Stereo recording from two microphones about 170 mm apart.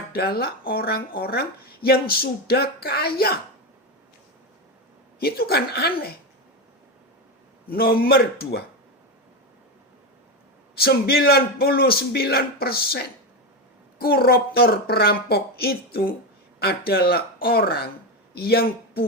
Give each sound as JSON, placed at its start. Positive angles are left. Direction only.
{"t": 0.1, "sound": "speech", "side_deg": 65}
{"t": 5.2, "sound": "a woman's voice", "side_deg": 65}
{"t": 7.7, "sound": "speech", "side_deg": 60}
{"t": 10.8, "sound": "a man's voice", "side_deg": 65}